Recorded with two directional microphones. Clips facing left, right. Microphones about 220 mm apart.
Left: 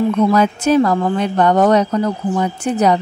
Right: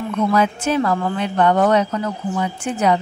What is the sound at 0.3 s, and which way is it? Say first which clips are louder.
Speech: left 5 dB; 40° left (ahead or behind).